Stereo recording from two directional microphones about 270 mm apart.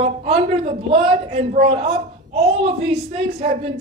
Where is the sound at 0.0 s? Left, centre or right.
Right.